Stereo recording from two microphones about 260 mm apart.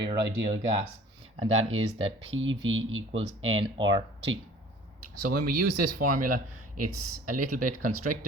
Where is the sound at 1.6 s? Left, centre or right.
Right.